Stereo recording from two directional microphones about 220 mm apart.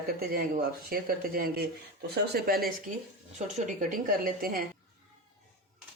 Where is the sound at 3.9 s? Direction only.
40° right (ahead or behind).